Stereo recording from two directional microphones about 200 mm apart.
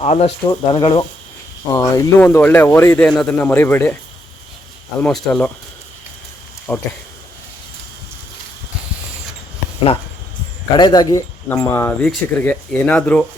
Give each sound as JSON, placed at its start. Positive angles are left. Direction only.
{"t": 0.0, "sound": "speech", "side_deg": 30}
{"t": 4.9, "sound": "speech", "side_deg": 5}
{"t": 6.7, "sound": "speech", "side_deg": 10}
{"t": 10.8, "sound": "speech", "side_deg": 20}